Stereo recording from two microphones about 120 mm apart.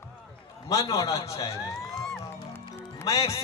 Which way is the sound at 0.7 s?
30° left (ahead or behind).